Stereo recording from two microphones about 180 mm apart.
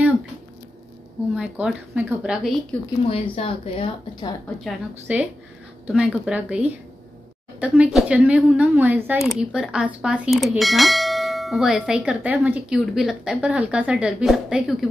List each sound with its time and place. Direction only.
1.3 s a woman's voice: 5° right (ahead or behind)
2.7 s speech: 10° left (ahead or behind)
3.1 s speech: 30° left (ahead or behind)
5.1 s a woman's voice: 10° right (ahead or behind)